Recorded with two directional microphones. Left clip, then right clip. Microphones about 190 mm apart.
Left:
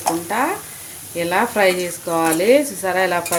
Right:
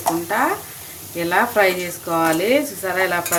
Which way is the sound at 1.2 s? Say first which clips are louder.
Even; 10° left (ahead or behind).